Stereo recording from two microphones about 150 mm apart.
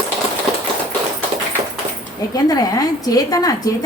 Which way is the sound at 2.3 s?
25° left (ahead or behind).